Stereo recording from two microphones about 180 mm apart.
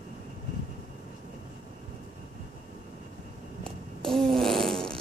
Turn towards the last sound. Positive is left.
turn(degrees=0)  # may be behind; listen again after turning